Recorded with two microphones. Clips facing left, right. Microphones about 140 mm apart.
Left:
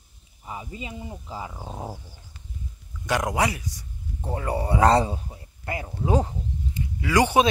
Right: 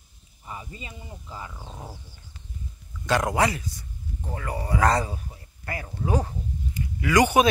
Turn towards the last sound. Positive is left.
turn(degrees=25)  # may be behind; listen again after turning